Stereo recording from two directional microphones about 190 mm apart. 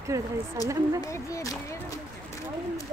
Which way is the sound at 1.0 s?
15° left (ahead or behind).